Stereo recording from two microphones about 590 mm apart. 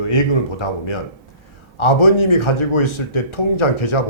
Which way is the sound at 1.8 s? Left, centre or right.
Left.